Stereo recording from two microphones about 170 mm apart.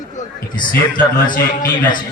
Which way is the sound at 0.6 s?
55° left (ahead or behind).